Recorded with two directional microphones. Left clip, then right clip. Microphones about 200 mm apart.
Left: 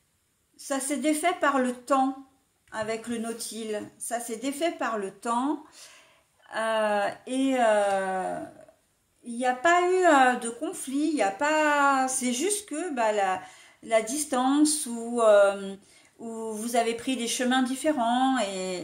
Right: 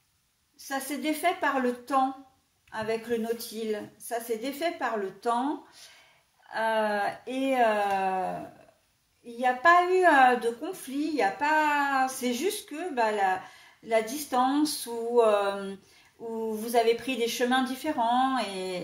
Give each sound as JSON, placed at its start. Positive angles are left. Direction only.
{"t": 0.6, "sound": "speech", "side_deg": 45}
{"t": 9.4, "sound": "speech", "side_deg": 50}